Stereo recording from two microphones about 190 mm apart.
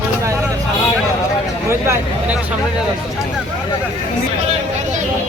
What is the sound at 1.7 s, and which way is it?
Speech, 15° right (ahead or behind).